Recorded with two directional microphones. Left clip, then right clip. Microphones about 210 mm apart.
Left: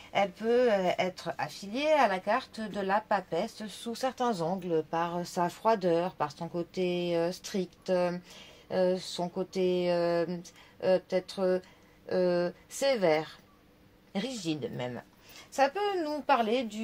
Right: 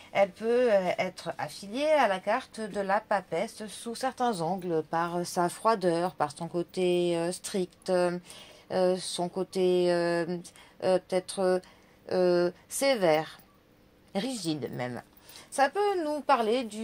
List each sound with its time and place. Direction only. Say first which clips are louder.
0.1 s speech: right 2 dB; 25° right (ahead or behind)